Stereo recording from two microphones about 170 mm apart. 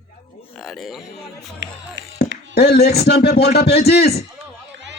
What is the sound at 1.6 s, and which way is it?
Speech, 90° right.